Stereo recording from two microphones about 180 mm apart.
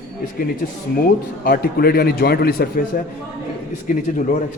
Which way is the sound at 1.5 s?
55° left (ahead or behind).